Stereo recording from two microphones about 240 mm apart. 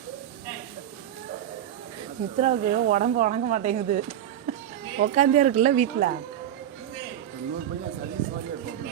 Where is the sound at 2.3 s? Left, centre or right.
Right.